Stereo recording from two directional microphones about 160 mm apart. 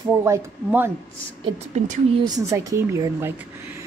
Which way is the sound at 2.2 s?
20° right (ahead or behind).